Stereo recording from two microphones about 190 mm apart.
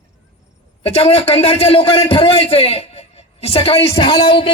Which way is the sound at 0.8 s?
30° left (ahead or behind).